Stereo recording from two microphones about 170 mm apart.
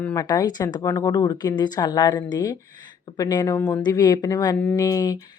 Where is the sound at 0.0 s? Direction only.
20° left (ahead or behind).